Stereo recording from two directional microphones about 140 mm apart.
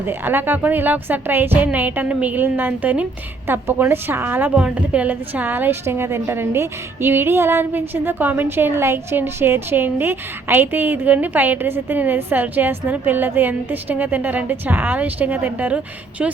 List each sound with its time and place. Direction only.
0.0 s a woman's voice: 15° right (ahead or behind)